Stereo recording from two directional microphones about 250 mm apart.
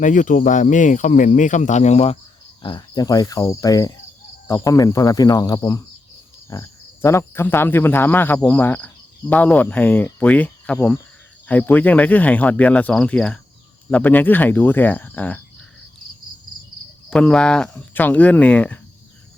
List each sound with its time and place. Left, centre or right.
0.0 s speech: left; by 15.4 s centre
17.1 s speech: centre